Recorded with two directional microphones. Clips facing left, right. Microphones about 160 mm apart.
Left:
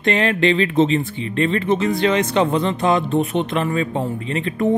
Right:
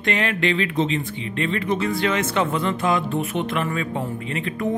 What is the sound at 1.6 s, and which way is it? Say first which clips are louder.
Speech: left 4 dB; 25° left (ahead or behind).